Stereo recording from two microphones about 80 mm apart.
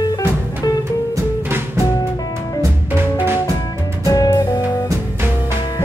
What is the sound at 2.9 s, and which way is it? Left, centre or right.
Music, right.